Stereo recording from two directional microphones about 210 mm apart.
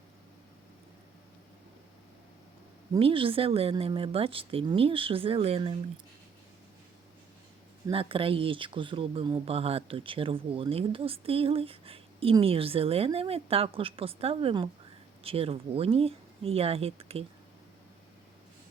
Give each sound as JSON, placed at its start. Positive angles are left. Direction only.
{"t": 2.9, "sound": "speech", "side_deg": -25}
{"t": 7.9, "sound": "speech", "side_deg": -25}